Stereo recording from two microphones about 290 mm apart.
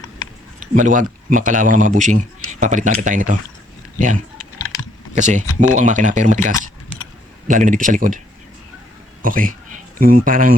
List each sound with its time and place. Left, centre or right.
0.6 s a man's voice: right
9.2 s a man's voice: right